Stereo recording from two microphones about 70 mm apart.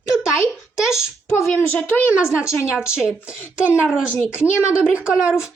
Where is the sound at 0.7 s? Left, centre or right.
Centre.